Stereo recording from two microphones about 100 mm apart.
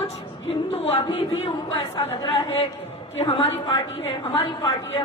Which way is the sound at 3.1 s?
65° left (ahead or behind).